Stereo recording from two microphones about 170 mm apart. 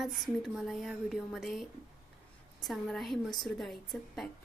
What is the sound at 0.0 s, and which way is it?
A woman's voice, centre (ahead or behind).